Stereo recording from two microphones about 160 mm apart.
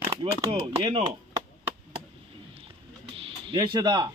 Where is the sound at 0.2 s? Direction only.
35° right (ahead or behind).